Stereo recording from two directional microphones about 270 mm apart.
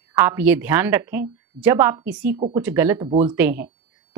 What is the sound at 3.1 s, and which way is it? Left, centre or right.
Speech, right.